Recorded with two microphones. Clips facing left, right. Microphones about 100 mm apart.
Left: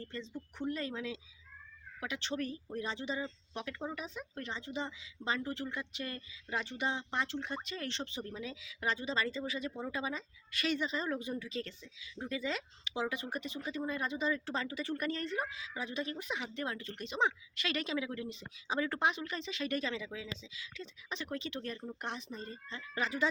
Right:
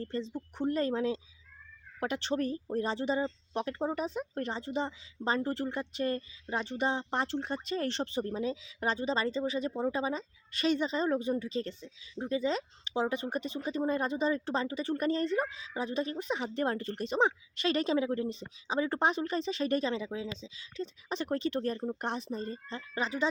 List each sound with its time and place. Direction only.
0.0 s speech: 35° right (ahead or behind)
18.7 s speech: 25° right (ahead or behind)
18.9 s speech: 35° right (ahead or behind)
23.0 s speech: 25° right (ahead or behind)